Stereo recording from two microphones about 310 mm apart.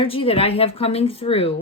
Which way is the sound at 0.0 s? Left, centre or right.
Centre.